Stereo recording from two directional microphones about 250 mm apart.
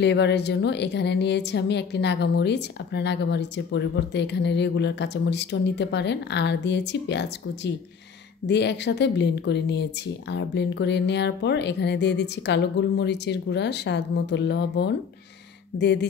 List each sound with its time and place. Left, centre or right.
0.0 s a woman's voice: left